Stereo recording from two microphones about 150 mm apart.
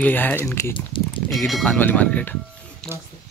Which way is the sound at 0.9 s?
35° left (ahead or behind).